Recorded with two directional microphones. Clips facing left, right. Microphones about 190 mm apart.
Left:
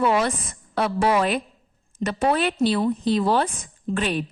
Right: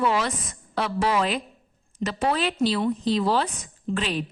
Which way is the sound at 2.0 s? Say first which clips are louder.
Left 3 dB; 55° left (ahead or behind).